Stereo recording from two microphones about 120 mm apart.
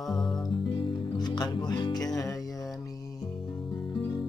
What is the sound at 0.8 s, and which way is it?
Music, 40° left (ahead or behind).